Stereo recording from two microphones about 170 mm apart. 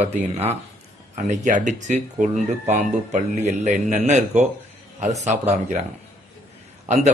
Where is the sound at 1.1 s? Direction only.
45° right (ahead or behind).